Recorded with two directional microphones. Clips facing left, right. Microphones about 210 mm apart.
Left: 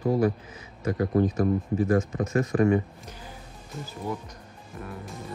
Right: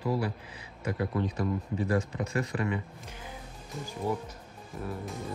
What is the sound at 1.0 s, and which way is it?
Speech, 40° left (ahead or behind).